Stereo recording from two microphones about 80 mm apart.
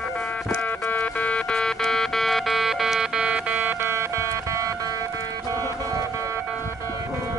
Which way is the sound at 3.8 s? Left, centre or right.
Right.